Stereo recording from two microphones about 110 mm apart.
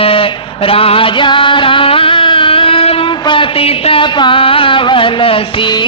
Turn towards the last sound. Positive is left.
turn(degrees=45)  # may be behind; listen again after turning